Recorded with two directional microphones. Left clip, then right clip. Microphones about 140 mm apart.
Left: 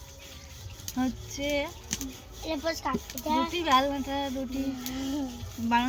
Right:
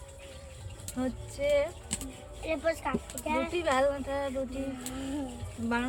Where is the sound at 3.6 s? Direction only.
20° right (ahead or behind).